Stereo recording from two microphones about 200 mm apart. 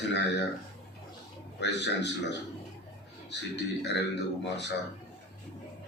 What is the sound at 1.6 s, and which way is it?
Speech, 60° left (ahead or behind).